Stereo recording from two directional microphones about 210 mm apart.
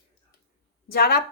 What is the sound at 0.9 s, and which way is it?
Speech, 45° left (ahead or behind).